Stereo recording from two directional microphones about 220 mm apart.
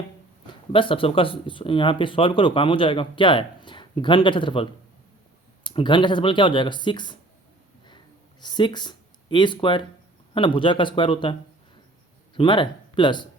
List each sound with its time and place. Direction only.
0.7 s speech: 25° left (ahead or behind)
8.4 s speech: 20° left (ahead or behind)